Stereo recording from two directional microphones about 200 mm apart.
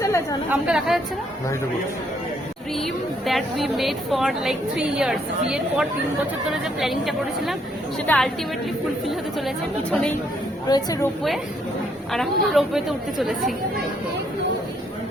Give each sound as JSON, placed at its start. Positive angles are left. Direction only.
{"t": 0.0, "sound": "chatter", "side_deg": 15}
{"t": 0.5, "sound": "a woman's voice", "side_deg": -5}
{"t": 2.7, "sound": "a woman's voice", "side_deg": 0}
{"t": 10.7, "sound": "a woman's voice", "side_deg": 20}
{"t": 12.1, "sound": "a woman's voice", "side_deg": 0}